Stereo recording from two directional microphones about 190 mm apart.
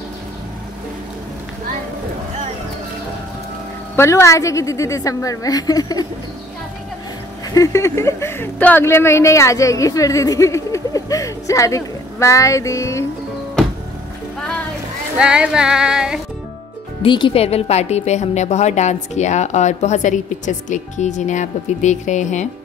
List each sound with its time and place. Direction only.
3.9 s speech: 15° left (ahead or behind)
7.5 s speech: 15° left (ahead or behind)
15.1 s a sound: 5° right (ahead or behind)
17.0 s a woman's voice: 25° left (ahead or behind)